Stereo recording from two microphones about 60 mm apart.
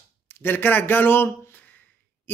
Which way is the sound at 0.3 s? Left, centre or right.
Left.